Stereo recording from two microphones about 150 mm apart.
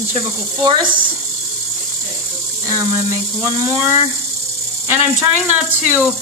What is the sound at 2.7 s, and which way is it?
Speech, 20° right (ahead or behind).